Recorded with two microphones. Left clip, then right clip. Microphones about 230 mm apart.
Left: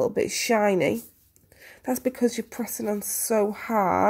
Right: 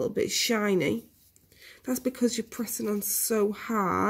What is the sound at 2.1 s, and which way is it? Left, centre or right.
Speech, centre.